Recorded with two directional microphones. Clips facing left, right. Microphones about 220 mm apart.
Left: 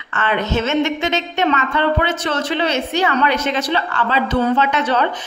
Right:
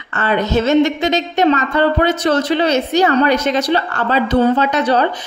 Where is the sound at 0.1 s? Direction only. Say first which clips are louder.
Right 3 dB; 40° right (ahead or behind).